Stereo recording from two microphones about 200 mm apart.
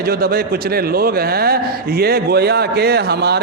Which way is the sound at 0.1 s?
50° right (ahead or behind).